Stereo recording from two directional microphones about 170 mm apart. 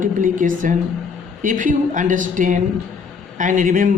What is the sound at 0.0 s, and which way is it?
A man's voice, 50° right (ahead or behind).